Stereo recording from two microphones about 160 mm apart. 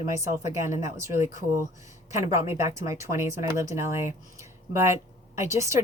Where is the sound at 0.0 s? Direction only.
20° right (ahead or behind).